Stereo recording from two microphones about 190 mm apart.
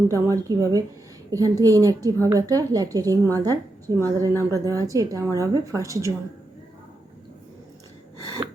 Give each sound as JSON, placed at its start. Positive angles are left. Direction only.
{"t": 0.1, "sound": "a woman's voice", "side_deg": -20}